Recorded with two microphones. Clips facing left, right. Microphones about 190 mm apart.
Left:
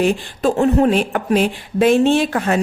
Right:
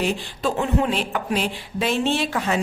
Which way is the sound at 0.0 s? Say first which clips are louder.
Left 7 dB; 50° left (ahead or behind).